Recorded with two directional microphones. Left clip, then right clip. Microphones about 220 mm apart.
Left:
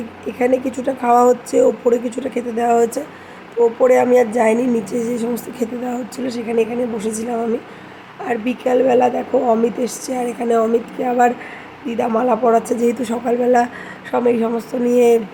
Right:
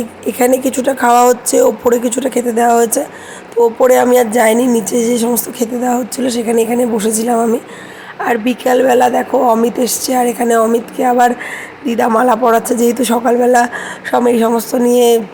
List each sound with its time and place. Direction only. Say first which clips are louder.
0.3 s a woman's voice: right 5 dB; 20° right (ahead or behind)